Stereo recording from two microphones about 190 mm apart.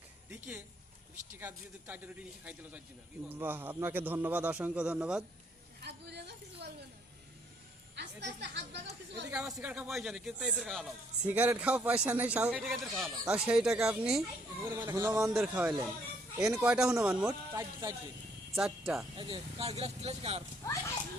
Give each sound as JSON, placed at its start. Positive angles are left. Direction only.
{"t": 0.3, "sound": "a sound", "side_deg": -10}
{"t": 1.4, "sound": "a man's voice", "side_deg": -10}
{"t": 5.8, "sound": "a sound", "side_deg": -60}
{"t": 7.9, "sound": "a woman's voice", "side_deg": -65}
{"t": 9.3, "sound": "a man's voice", "side_deg": -5}
{"t": 15.2, "sound": "a man's voice", "side_deg": 0}
{"t": 17.5, "sound": "a man's voice", "side_deg": -15}
{"t": 18.5, "sound": "speech", "side_deg": 0}
{"t": 19.1, "sound": "speech", "side_deg": -25}